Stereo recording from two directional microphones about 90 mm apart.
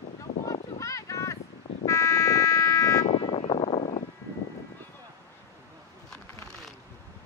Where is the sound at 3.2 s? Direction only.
90° left.